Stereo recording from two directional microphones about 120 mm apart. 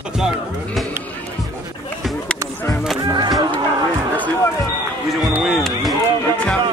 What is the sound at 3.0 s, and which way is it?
Speech, 35° right (ahead or behind).